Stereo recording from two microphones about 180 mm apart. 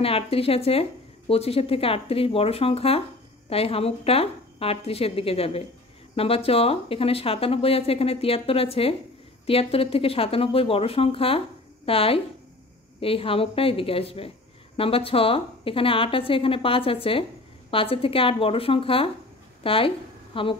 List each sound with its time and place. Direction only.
0.0 s a woman's voice: 30° left (ahead or behind)